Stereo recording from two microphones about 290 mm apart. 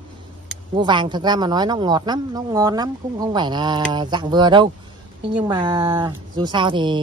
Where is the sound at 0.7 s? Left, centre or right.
Centre.